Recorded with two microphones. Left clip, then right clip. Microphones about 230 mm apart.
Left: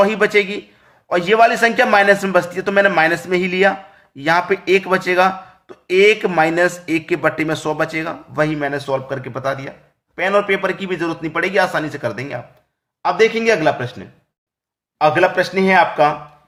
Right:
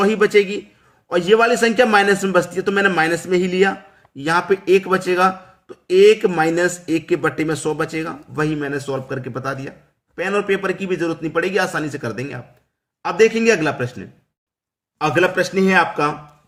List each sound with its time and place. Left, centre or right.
0.0 s speech: centre
14.9 s speech: centre